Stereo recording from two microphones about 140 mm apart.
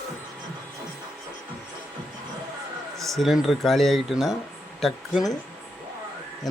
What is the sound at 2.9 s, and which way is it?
Speech, centre (ahead or behind).